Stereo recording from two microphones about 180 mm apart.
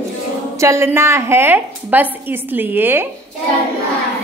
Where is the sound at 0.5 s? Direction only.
15° right (ahead or behind).